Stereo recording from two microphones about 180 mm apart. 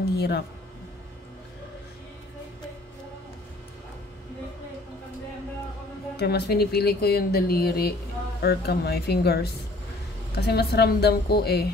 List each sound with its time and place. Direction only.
0.0 s speech: 65° left (ahead or behind)
6.1 s speech: 65° left (ahead or behind)